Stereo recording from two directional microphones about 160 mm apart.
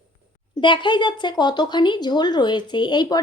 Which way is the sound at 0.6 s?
30° left (ahead or behind).